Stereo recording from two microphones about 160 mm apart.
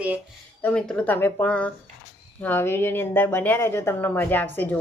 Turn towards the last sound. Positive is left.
turn(degrees=10)  # may be behind; listen again after turning